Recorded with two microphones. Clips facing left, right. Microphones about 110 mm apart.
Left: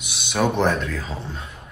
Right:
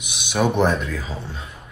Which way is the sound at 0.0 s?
15° right (ahead or behind).